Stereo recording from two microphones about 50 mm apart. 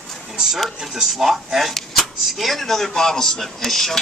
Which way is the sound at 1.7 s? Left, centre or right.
Centre.